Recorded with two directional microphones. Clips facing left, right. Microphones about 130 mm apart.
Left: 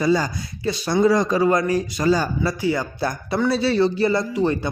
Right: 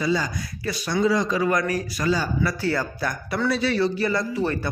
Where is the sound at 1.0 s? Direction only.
45° left (ahead or behind).